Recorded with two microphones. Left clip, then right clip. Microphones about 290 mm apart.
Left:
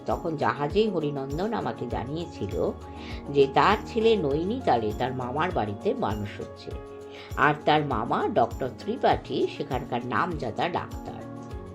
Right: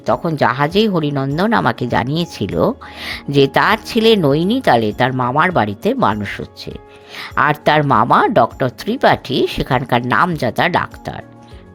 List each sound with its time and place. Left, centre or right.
0.0 s speech: right